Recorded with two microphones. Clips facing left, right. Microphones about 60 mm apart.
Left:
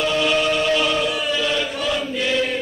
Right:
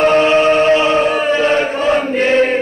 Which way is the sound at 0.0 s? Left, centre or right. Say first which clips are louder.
Right 9 dB; right.